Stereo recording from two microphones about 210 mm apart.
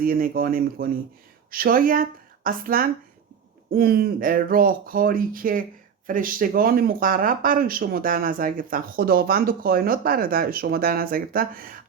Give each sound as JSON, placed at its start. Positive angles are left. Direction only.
{"t": 0.0, "sound": "speech", "side_deg": -45}